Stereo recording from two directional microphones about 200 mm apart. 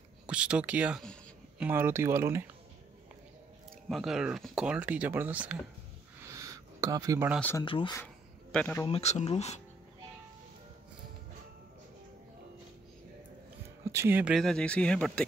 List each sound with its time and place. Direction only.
0.3 s a sound: 5° right (ahead or behind)
1.7 s speech: 10° right (ahead or behind)
3.9 s speech: centre (ahead or behind)
6.3 s a sound: 15° right (ahead or behind)
7.3 s speech: 10° left (ahead or behind)
7.6 s speech: 25° left (ahead or behind)
7.9 s a sound: 5° left (ahead or behind)
8.8 s speech: 30° left (ahead or behind)
13.8 s speech: 10° right (ahead or behind); by 15.2 s 5° left (ahead or behind)